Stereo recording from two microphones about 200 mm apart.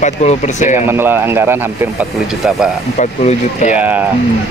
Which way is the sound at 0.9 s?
10° right (ahead or behind).